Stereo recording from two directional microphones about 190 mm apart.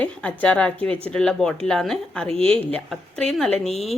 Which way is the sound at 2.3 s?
30° right (ahead or behind).